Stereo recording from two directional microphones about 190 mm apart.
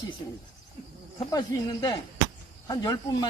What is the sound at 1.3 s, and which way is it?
Speech, 20° left (ahead or behind).